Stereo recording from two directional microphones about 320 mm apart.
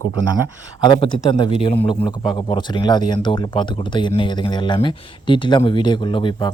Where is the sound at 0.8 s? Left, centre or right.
Centre.